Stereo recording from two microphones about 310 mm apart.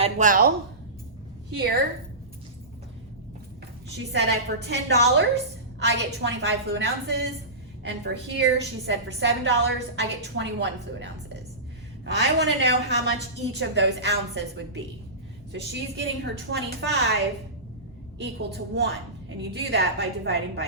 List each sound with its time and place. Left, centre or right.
0.0 s speech: right
3.8 s a woman's voice: right
18.2 s a woman's voice: right